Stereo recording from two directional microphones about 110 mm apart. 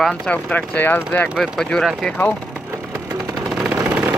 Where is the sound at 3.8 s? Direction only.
15° right (ahead or behind).